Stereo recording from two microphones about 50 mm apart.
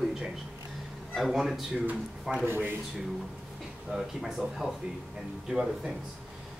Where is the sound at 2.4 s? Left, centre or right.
Right.